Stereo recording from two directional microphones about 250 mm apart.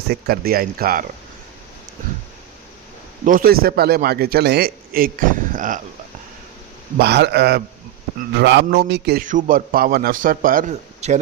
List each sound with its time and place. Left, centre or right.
0.1 s a man's voice: right
3.2 s a man's voice: right
7.0 s a man's voice: right